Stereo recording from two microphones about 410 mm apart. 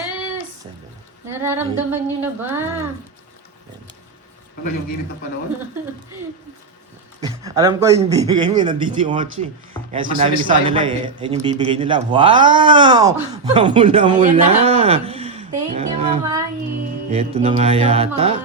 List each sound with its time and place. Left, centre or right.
1.3 s a woman's voice: centre
7.2 s speech: centre